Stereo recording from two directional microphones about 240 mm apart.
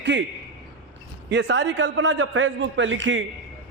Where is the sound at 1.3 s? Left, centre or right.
Right.